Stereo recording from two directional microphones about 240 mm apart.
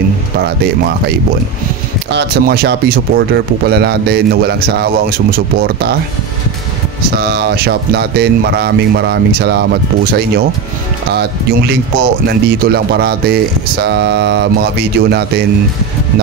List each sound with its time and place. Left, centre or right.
2.1 s speech: right
7.2 s speech: right